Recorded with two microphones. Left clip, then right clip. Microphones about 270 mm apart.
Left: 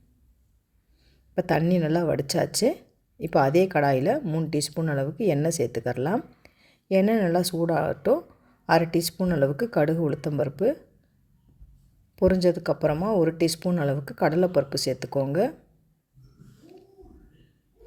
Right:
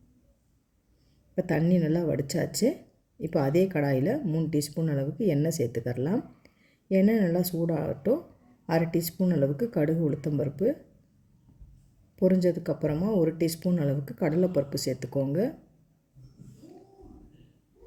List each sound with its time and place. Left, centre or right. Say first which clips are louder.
1.4 s speech: left 4 dB; left
12.1 s speech: left 4 dB; left